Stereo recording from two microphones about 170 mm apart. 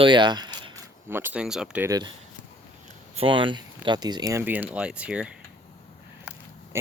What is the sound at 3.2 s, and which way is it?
Speech, 30° right (ahead or behind).